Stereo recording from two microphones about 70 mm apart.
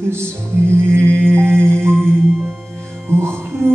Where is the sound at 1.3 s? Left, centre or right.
Right.